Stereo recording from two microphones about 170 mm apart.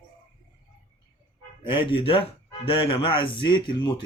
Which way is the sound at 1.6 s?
30° left (ahead or behind).